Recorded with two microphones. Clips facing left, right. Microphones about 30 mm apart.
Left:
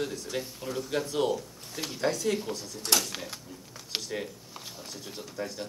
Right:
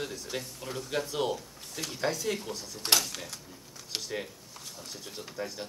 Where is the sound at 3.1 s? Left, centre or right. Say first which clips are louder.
Left 3 dB; centre.